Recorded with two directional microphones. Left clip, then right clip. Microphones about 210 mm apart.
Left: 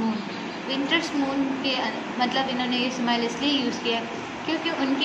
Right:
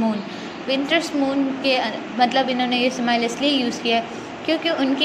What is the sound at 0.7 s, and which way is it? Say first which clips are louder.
A woman's voice: right 5 dB; 30° right (ahead or behind).